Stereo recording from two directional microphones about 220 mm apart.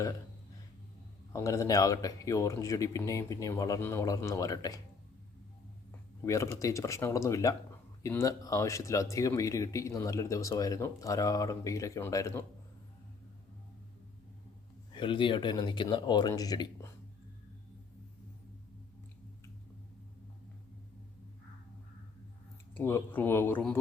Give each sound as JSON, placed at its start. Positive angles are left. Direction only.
{"t": 1.3, "sound": "speech", "side_deg": 15}
{"t": 6.2, "sound": "speech", "side_deg": 15}
{"t": 14.9, "sound": "speech", "side_deg": 20}
{"t": 22.7, "sound": "speech", "side_deg": 10}